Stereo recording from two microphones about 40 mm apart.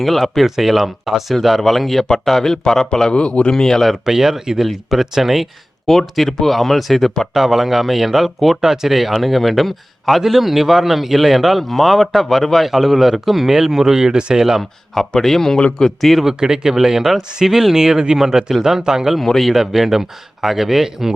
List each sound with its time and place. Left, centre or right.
0.0 s speech: centre
3.1 s speech: left
3.5 s speech: centre
3.9 s speech: centre
4.6 s speech: centre
5.8 s speech: centre; by 14.4 s right
15.2 s speech: centre
16.2 s speech: centre
19.2 s speech: centre
19.5 s speech: centre